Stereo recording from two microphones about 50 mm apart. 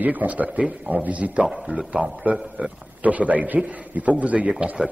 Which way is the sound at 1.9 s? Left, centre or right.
Right.